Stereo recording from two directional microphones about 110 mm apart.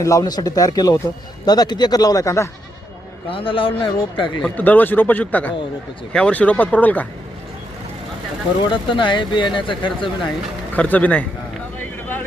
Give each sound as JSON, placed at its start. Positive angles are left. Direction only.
{"t": 0.0, "sound": "speech", "side_deg": 30}
{"t": 3.2, "sound": "speech", "side_deg": 55}
{"t": 4.4, "sound": "speech", "side_deg": 15}
{"t": 8.7, "sound": "speech", "side_deg": 50}
{"t": 10.8, "sound": "speech", "side_deg": 15}